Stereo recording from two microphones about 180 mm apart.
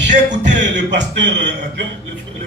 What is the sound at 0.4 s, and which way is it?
Speech, 75° right (ahead or behind).